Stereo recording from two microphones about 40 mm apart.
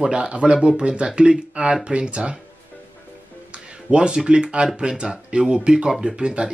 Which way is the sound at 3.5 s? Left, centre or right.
Right.